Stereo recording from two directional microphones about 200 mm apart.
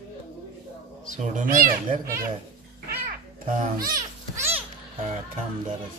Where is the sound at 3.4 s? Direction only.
45° right (ahead or behind).